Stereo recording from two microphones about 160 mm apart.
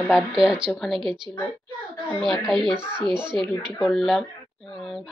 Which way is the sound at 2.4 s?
Centre (ahead or behind).